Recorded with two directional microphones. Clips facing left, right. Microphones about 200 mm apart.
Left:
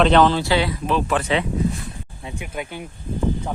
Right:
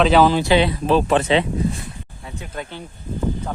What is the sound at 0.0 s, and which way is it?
Speech, 5° right (ahead or behind).